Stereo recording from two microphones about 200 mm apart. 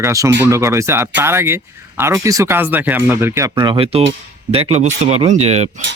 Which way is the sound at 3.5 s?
25° right (ahead or behind).